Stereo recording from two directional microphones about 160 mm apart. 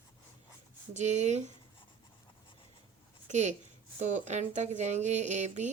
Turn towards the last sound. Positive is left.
turn(degrees=-45)  # may be behind; listen again after turning